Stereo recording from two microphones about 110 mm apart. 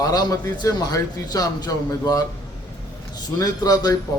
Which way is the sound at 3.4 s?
35° left (ahead or behind).